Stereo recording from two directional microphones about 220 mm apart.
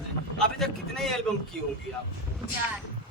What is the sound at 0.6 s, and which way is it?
Speech, centre (ahead or behind).